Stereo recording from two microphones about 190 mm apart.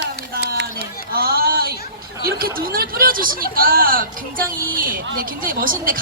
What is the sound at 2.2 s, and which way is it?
Speech, 50° right (ahead or behind).